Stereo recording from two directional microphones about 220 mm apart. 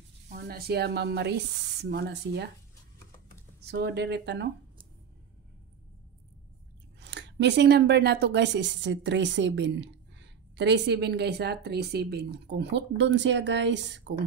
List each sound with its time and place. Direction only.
0.3 s a woman's voice: 45° right (ahead or behind)
3.6 s a woman's voice: 50° right (ahead or behind)
7.0 s a woman's voice: 50° right (ahead or behind)